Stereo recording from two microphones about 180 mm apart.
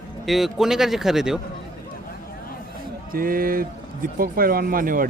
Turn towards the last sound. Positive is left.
turn(degrees=-50)  # may be behind; listen again after turning